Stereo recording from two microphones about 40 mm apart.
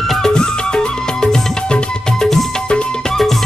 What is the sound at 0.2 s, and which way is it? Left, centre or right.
Music, centre.